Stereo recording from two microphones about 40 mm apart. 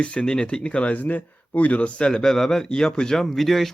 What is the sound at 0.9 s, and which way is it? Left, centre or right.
Speech, left.